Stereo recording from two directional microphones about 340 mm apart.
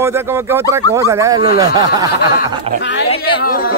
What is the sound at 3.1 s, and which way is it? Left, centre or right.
Speech, left.